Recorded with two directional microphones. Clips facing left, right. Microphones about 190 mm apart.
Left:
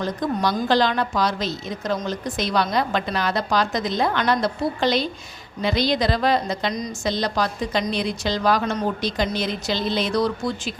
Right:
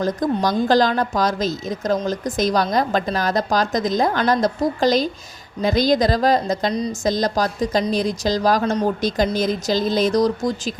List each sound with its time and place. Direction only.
0.0 s a woman's voice: 45° right (ahead or behind)